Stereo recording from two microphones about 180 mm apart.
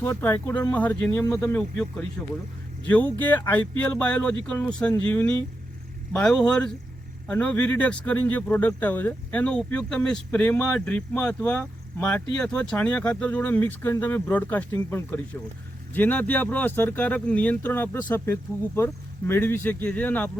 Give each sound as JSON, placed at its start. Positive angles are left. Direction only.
{"t": 0.0, "sound": "speech", "side_deg": 10}